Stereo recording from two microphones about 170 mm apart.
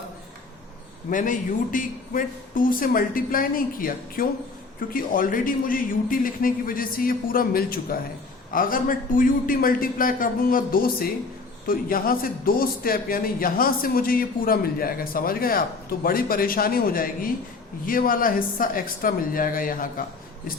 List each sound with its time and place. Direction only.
1.1 s a man's voice: 50° left (ahead or behind)